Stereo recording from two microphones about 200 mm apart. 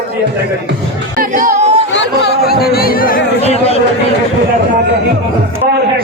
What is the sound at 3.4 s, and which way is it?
Speech, 30° left (ahead or behind).